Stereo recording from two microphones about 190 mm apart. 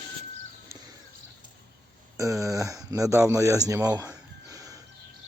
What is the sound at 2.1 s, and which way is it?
Speech, 15° right (ahead or behind).